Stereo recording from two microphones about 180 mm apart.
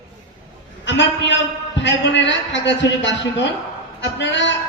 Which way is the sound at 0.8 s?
85° left.